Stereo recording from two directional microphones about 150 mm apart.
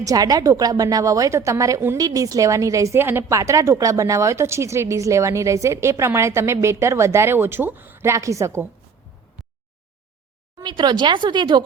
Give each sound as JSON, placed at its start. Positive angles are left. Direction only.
{"t": 0.0, "sound": "a woman's voice", "side_deg": -25}
{"t": 10.6, "sound": "speech", "side_deg": -30}